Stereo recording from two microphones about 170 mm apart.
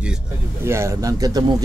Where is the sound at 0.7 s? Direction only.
15° right (ahead or behind).